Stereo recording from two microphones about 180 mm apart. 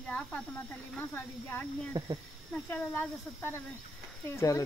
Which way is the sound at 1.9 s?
20° right (ahead or behind).